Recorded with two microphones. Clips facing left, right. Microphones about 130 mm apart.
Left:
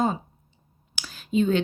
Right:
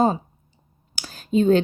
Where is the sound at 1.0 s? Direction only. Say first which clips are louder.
Right 3 dB; 40° right (ahead or behind).